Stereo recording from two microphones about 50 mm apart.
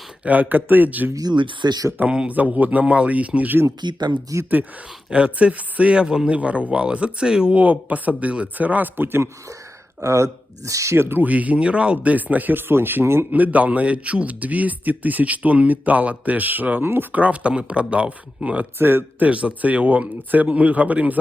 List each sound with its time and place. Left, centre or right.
0.3 s a man's voice: right
2.0 s a man's voice: right
2.3 s a man's voice: right
4.3 s speech: right
5.1 s a man's voice: right
7.5 s a man's voice: right
9.0 s speech: right
10.0 s speech: right
10.9 s speech: right
11.2 s a man's voice: right
12.1 s speech: right
13.3 s a man's voice: right
18.8 s speech: right
19.3 s a man's voice: right